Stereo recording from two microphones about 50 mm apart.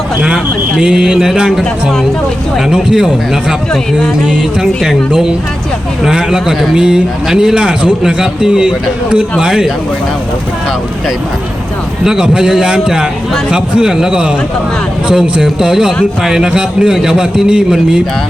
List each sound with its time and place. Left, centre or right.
0.8 s a man's voice: centre
2.6 s a man's voice: centre
4.6 s a man's voice: centre
12.0 s a man's voice: centre